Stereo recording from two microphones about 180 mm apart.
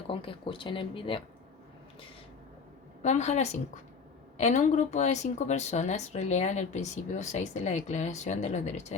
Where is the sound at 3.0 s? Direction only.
40° left (ahead or behind).